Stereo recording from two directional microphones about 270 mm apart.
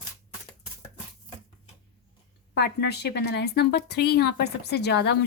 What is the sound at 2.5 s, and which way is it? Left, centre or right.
Speech, left.